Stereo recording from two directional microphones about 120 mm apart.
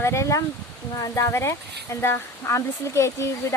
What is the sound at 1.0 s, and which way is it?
Speech, 25° left (ahead or behind).